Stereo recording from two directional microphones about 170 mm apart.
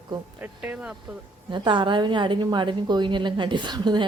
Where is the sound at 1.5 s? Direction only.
25° right (ahead or behind).